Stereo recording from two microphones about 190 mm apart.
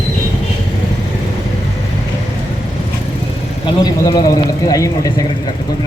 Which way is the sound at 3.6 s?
20° left (ahead or behind).